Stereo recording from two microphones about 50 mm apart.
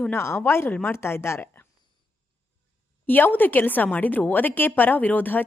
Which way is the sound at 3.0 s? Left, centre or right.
Left.